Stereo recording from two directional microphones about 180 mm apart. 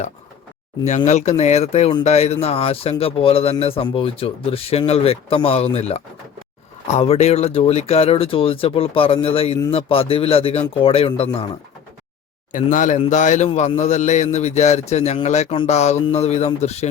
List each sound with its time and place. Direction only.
0.9 s speech: 40° left (ahead or behind)
12.5 s speech: 45° left (ahead or behind)